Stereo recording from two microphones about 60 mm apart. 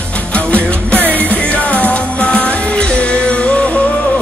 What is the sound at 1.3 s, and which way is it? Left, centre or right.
Music, centre.